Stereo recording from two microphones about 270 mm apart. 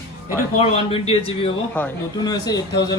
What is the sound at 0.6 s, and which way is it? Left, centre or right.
Speech, left.